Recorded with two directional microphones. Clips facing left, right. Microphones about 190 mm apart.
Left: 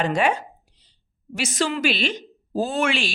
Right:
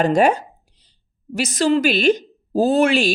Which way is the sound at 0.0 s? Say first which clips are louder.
Right 6 dB; 40° right (ahead or behind).